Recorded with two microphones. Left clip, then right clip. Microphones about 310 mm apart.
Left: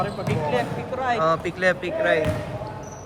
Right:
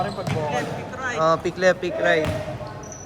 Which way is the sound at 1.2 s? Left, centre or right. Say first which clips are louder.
Right 5 dB; centre.